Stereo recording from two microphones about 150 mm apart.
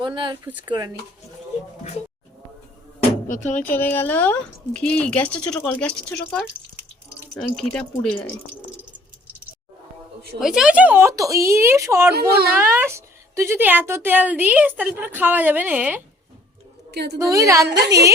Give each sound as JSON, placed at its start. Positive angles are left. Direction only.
{"t": 0.0, "sound": "speech", "side_deg": -30}
{"t": 3.2, "sound": "speech", "side_deg": 60}
{"t": 3.6, "sound": "speech", "side_deg": 10}
{"t": 7.3, "sound": "speech", "side_deg": 5}
{"t": 10.4, "sound": "a woman's voice", "side_deg": -5}
{"t": 16.9, "sound": "a woman's voice", "side_deg": -90}
{"t": 17.2, "sound": "a woman's voice", "side_deg": -20}